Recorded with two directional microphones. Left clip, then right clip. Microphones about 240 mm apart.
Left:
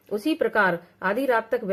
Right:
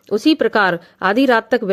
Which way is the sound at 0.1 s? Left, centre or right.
Right.